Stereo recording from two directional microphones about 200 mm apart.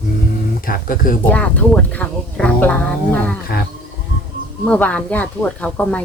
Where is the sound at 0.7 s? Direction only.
45° left (ahead or behind).